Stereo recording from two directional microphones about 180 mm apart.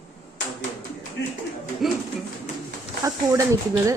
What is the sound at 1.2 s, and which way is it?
Clapping, 80° left.